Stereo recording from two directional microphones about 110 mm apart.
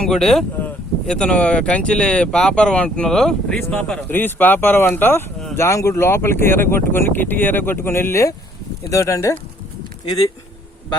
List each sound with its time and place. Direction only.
0.0 s speech: 5° left (ahead or behind); by 9.3 s 25° left (ahead or behind)